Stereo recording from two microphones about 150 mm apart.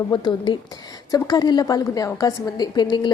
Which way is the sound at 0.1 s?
30° left (ahead or behind).